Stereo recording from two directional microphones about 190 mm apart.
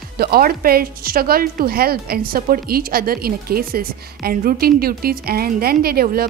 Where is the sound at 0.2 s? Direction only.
50° right (ahead or behind).